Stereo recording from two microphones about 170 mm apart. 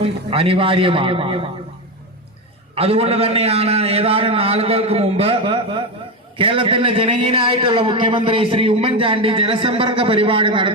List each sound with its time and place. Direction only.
0.0 s a man's voice: 35° right (ahead or behind)
2.7 s a man's voice: 35° right (ahead or behind)